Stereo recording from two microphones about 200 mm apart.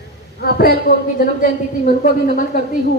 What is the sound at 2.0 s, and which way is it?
Speech, 40° left (ahead or behind).